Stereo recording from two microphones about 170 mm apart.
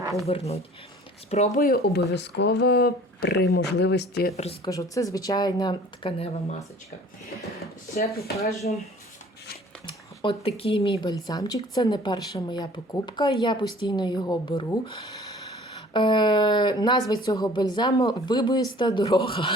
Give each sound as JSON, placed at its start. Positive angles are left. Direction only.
{"t": 0.3, "sound": "speech", "side_deg": 35}
{"t": 1.6, "sound": "speech", "side_deg": 65}
{"t": 3.5, "sound": "speech", "side_deg": 80}
{"t": 4.6, "sound": "speech", "side_deg": 20}
{"t": 7.9, "sound": "speech", "side_deg": 65}
{"t": 8.7, "sound": "speech", "side_deg": 55}
{"t": 9.8, "sound": "a sound", "side_deg": 30}
{"t": 10.6, "sound": "speech", "side_deg": 35}
{"t": 11.1, "sound": "speech", "side_deg": 20}